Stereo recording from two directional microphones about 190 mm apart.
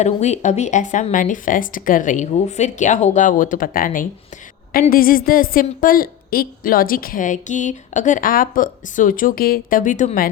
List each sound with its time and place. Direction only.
0.0 s a woman's voice: 35° left (ahead or behind)